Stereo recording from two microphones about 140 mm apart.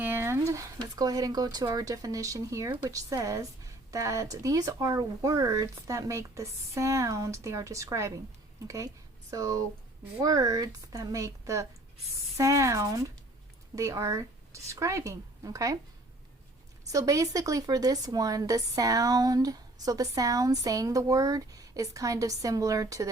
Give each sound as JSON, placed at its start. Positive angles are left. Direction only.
{"t": 0.0, "sound": "a sound", "side_deg": -15}
{"t": 0.3, "sound": "speech", "side_deg": -25}
{"t": 16.9, "sound": "speech", "side_deg": -25}